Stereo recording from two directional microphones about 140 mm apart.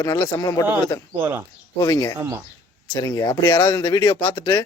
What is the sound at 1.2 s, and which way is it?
Speech, 15° right (ahead or behind).